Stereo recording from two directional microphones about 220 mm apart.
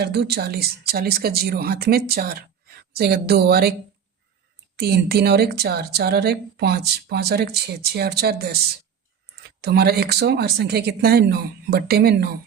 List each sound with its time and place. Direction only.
0.0 s a woman's voice: 50° right (ahead or behind)
4.8 s a woman's voice: 45° right (ahead or behind)